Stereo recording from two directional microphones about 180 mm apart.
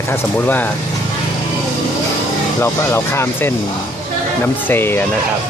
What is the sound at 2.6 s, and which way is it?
Speech, 15° left (ahead or behind).